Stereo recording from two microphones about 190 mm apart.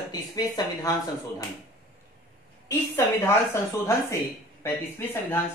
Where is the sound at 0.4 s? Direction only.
20° left (ahead or behind).